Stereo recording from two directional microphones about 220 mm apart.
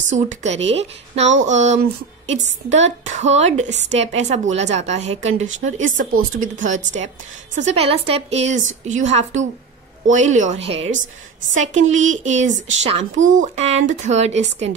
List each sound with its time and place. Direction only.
0.3 s a woman's voice: 30° right (ahead or behind)